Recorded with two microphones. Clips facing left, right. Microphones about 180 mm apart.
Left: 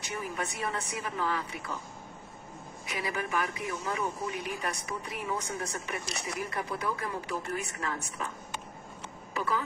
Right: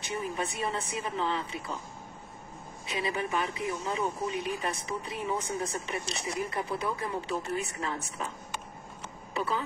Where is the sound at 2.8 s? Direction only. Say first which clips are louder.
Right 2 dB; 25° right (ahead or behind).